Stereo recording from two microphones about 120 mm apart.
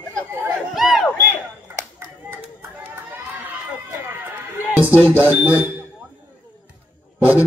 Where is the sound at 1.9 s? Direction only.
20° right (ahead or behind).